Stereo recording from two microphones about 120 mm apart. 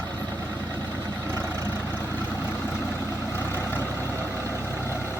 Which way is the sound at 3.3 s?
20° left (ahead or behind).